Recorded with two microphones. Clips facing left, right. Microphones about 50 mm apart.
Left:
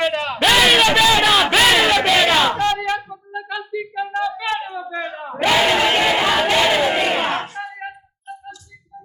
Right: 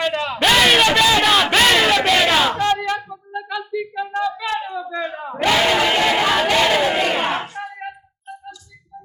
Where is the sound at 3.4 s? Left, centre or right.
Left.